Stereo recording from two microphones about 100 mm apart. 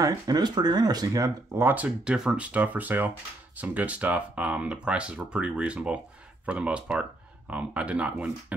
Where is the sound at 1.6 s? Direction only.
15° right (ahead or behind).